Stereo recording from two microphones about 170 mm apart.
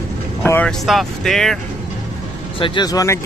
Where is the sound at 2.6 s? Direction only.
25° left (ahead or behind).